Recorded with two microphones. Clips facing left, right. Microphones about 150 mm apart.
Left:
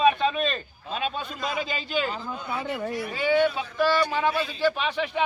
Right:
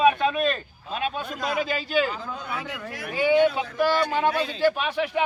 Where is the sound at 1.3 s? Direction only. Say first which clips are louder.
Right 3 dB; 45° right (ahead or behind).